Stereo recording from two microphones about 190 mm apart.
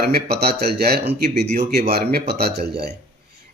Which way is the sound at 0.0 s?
60° right (ahead or behind).